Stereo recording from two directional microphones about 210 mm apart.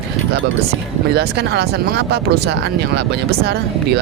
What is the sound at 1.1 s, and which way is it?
Speech, 50° right (ahead or behind).